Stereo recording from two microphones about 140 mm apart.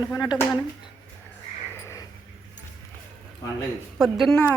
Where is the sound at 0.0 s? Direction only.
30° left (ahead or behind).